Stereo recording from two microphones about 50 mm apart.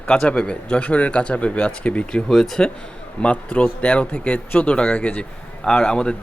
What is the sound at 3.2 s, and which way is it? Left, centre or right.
Speech, left.